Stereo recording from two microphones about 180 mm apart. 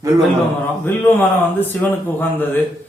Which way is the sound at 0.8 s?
10° left (ahead or behind).